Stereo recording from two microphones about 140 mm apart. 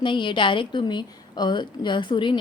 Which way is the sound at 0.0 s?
35° left (ahead or behind).